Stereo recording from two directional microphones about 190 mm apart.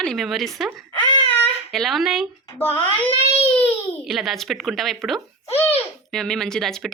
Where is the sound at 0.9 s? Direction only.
25° left (ahead or behind).